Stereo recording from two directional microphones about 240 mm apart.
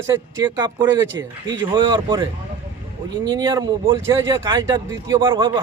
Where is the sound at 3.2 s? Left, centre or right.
Centre.